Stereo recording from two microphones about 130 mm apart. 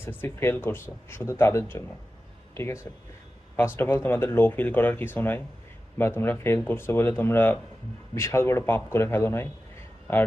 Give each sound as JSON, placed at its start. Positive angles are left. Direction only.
{"t": 0.0, "sound": "speech", "side_deg": 15}
{"t": 2.9, "sound": "a man's voice", "side_deg": 20}